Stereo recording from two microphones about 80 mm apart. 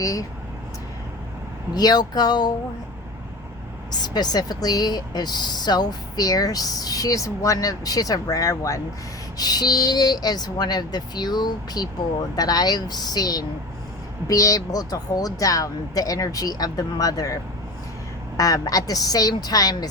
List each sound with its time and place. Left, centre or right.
0.0 s speech: left
1.7 s speech: left
3.9 s speech: left
9.4 s speech: left